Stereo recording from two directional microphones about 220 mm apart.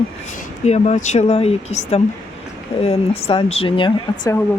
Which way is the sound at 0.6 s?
30° left (ahead or behind).